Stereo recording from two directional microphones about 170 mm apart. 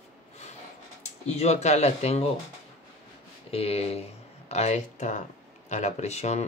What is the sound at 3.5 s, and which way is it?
Speech, 35° left (ahead or behind).